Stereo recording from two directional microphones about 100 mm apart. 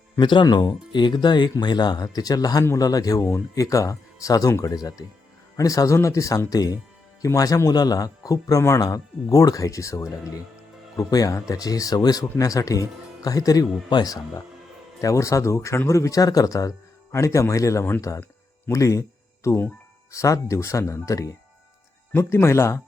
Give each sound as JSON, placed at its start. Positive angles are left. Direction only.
{"t": 0.2, "sound": "speech", "side_deg": 50}